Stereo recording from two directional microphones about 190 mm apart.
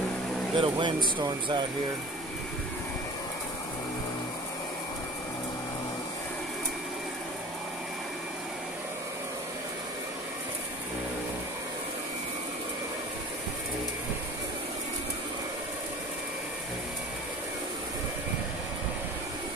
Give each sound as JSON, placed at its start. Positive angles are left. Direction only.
{"t": 0.6, "sound": "speech", "side_deg": -25}